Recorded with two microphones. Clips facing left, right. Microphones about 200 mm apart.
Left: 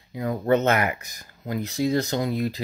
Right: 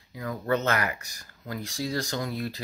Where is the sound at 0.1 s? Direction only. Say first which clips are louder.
Left 6 dB; 25° left (ahead or behind).